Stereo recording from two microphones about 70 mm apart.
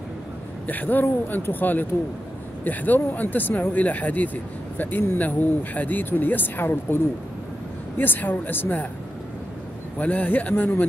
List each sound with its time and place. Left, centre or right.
0.7 s speech: left
8.0 s speech: left
9.9 s speech: left